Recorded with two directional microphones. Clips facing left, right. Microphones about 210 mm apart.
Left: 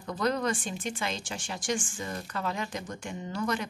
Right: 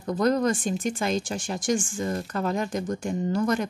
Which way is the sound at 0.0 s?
45° right (ahead or behind).